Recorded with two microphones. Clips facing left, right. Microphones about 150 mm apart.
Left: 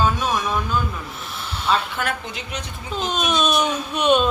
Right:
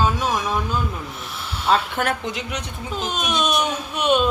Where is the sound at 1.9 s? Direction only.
70° right (ahead or behind).